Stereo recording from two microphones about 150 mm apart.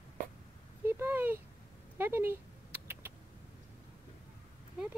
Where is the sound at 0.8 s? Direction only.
15° right (ahead or behind).